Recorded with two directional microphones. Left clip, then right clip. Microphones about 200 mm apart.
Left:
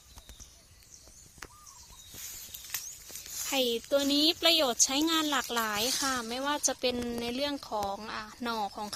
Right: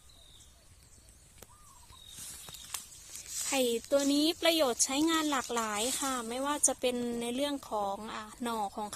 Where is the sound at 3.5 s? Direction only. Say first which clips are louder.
Left 1 dB; 5° right (ahead or behind).